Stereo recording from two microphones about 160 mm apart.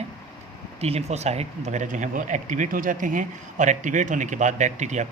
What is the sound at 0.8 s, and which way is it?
Speech, 40° right (ahead or behind).